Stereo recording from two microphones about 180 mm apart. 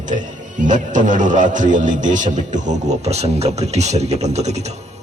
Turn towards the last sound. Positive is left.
turn(degrees=-35)  # may be behind; listen again after turning